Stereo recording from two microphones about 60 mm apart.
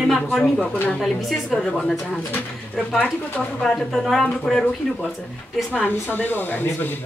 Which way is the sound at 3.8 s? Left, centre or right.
Centre.